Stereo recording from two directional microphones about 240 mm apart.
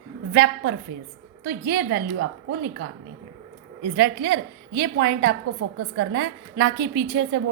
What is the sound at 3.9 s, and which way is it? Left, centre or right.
A woman's voice, right.